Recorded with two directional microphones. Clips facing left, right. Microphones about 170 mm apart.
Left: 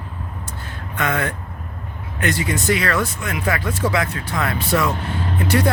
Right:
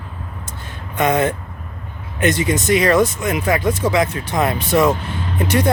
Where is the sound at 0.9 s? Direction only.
20° right (ahead or behind).